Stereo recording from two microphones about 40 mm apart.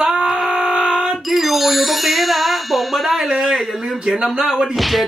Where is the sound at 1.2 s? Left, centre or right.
Centre.